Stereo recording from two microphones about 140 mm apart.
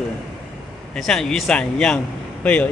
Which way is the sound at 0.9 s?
Centre (ahead or behind).